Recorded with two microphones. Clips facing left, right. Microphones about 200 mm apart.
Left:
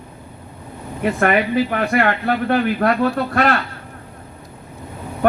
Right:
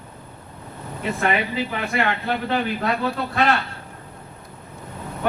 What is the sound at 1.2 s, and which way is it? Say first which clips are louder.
A man's voice: left 6 dB; 60° left (ahead or behind).